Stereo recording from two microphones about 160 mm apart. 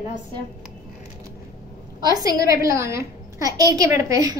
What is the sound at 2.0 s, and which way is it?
A child's voice, 25° right (ahead or behind).